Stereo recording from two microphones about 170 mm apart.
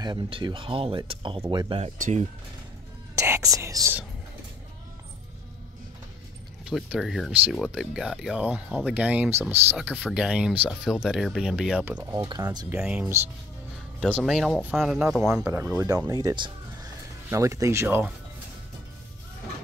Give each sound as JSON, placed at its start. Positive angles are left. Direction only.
{"t": 0.0, "sound": "speech", "side_deg": -25}
{"t": 1.8, "sound": "speech", "side_deg": -45}
{"t": 3.2, "sound": "speech", "side_deg": -15}
{"t": 6.6, "sound": "speech", "side_deg": -5}
{"t": 12.2, "sound": "speech", "side_deg": -25}
{"t": 12.6, "sound": "speech", "side_deg": -10}
{"t": 13.9, "sound": "speech", "side_deg": 5}
{"t": 16.1, "sound": "music", "side_deg": -20}
{"t": 17.3, "sound": "speech", "side_deg": -15}